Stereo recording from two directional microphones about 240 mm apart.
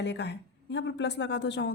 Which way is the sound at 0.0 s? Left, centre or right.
Left.